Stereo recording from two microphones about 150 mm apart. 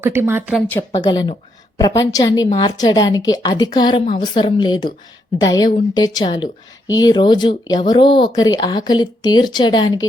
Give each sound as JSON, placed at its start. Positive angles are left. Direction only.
{"t": 0.0, "sound": "a woman's voice", "side_deg": -15}
{"t": 0.9, "sound": "speech", "side_deg": 30}